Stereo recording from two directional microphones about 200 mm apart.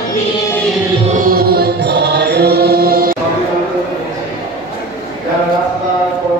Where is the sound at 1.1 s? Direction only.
45° right (ahead or behind).